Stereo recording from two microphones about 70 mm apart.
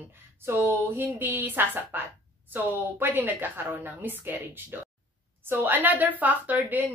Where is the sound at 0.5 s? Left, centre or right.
Right.